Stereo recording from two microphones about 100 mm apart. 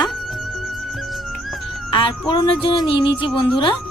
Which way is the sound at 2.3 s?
55° left (ahead or behind).